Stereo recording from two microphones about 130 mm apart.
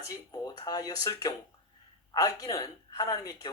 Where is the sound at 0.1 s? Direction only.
30° left (ahead or behind).